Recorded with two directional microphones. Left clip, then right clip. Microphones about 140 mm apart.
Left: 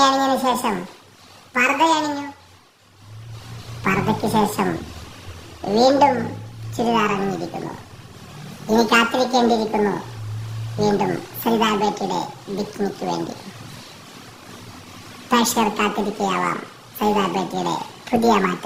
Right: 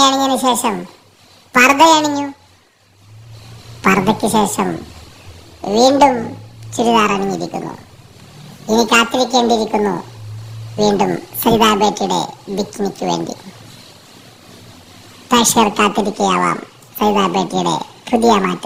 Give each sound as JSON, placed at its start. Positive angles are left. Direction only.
{"t": 0.0, "sound": "a sound", "side_deg": -20}
{"t": 0.4, "sound": "a woman's voice", "side_deg": -25}
{"t": 1.5, "sound": "a woman's voice", "side_deg": -45}
{"t": 3.8, "sound": "a woman's voice", "side_deg": -40}
{"t": 10.8, "sound": "a woman's voice", "side_deg": -35}
{"t": 15.3, "sound": "a woman's voice", "side_deg": -30}